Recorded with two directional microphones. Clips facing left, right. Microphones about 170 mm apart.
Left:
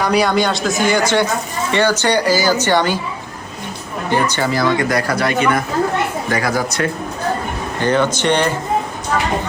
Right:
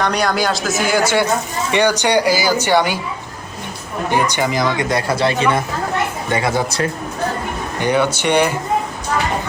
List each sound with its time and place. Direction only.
0.0 s a woman's voice: 5° left (ahead or behind); by 3.0 s 10° right (ahead or behind)
4.1 s speech: 15° right (ahead or behind)
7.8 s a woman's voice: 10° right (ahead or behind)